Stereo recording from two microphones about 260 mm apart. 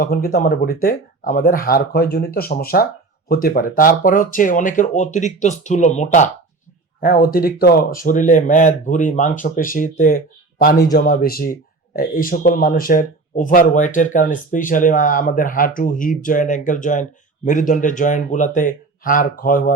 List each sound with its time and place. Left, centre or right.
0.0 s speech: left